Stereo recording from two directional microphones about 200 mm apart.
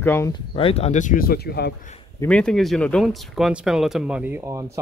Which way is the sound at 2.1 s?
5° left (ahead or behind).